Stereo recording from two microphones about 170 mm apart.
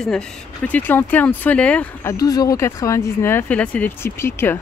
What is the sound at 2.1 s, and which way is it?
Speech, 20° left (ahead or behind).